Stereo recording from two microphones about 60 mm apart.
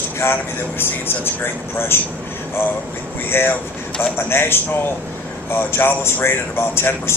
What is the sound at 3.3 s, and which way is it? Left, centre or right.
A man's voice, left.